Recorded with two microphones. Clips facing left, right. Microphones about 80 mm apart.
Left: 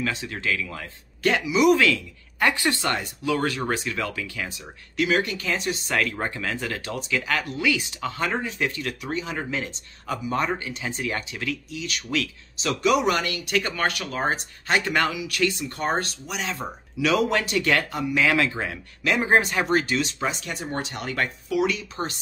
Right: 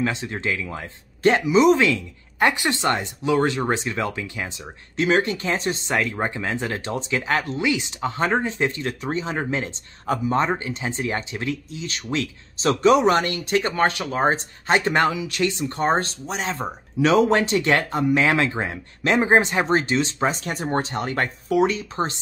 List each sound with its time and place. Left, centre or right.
0.0 s speech: right